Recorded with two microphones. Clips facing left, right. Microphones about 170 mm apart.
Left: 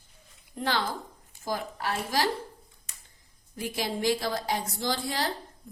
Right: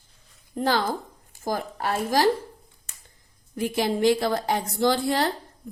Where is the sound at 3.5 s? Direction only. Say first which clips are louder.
Right 7 dB; 60° right (ahead or behind).